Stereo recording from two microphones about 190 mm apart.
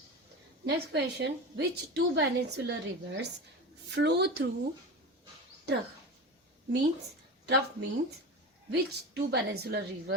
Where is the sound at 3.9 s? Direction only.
65° right (ahead or behind).